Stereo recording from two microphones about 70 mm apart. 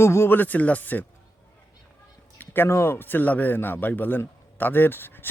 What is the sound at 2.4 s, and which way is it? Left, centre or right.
Speech, left.